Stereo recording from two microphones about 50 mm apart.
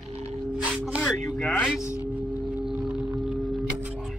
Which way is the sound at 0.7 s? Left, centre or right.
Right.